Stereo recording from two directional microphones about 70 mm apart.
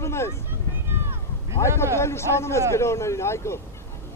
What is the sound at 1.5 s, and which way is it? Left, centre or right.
Speech, left.